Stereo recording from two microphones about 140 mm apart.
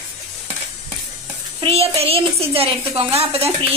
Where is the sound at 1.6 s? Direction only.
45° right (ahead or behind).